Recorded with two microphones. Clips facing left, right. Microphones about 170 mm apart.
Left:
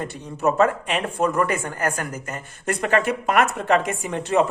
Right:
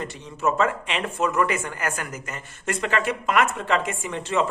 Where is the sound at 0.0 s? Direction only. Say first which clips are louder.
Left 3 dB; 50° left (ahead or behind).